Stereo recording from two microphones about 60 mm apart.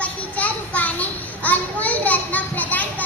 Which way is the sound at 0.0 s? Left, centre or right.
Left.